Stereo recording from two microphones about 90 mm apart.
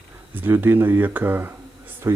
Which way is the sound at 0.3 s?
25° right (ahead or behind).